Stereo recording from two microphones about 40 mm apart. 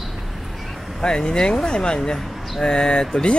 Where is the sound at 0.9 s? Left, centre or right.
Centre.